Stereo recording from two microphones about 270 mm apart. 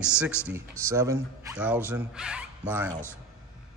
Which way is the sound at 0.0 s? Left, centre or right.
Centre.